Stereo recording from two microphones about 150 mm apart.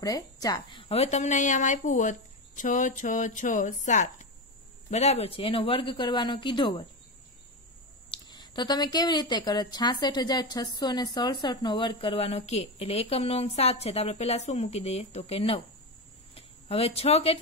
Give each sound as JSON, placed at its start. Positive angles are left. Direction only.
{"t": 0.0, "sound": "a woman's voice", "side_deg": 25}
{"t": 8.1, "sound": "speech", "side_deg": 30}